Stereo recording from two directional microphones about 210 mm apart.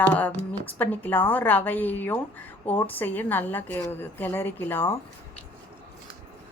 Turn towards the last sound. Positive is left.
turn(degrees=10)  # may be behind; listen again after turning